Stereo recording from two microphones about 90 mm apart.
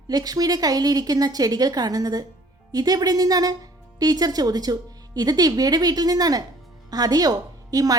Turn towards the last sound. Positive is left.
turn(degrees=-45)  # may be behind; listen again after turning